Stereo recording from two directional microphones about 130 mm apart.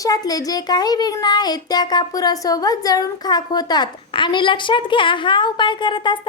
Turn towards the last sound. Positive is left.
turn(degrees=35)  # may be behind; listen again after turning